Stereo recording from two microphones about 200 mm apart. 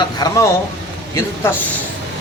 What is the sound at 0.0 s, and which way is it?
Speech, 20° left (ahead or behind).